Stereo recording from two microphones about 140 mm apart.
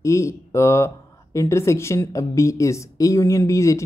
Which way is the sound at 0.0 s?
20° left (ahead or behind).